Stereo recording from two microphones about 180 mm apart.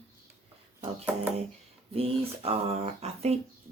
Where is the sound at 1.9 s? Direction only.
35° right (ahead or behind).